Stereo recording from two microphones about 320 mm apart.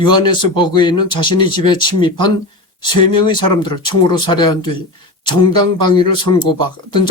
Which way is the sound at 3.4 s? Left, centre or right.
Centre.